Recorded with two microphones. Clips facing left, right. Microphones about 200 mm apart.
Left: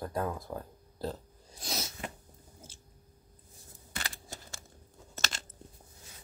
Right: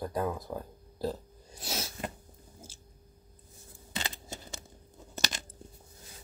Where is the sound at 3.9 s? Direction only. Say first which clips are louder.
Right 4 dB; 20° right (ahead or behind).